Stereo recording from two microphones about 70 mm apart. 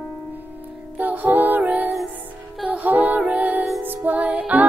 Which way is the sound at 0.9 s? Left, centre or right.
Right.